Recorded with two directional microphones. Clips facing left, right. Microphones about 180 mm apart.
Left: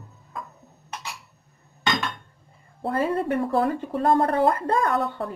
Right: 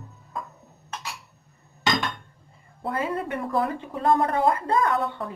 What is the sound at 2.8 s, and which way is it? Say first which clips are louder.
Speech: left 4 dB; 35° left (ahead or behind).